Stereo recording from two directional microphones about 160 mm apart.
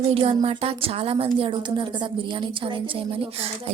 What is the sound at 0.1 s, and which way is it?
A woman's voice, 40° right (ahead or behind).